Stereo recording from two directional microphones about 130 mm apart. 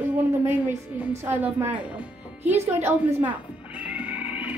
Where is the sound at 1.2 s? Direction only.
15° right (ahead or behind).